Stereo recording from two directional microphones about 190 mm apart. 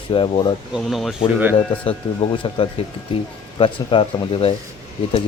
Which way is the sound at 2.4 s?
25° left (ahead or behind).